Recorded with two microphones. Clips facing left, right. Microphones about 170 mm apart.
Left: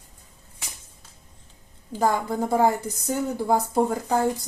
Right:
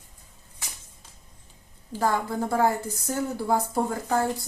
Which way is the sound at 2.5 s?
15° left (ahead or behind).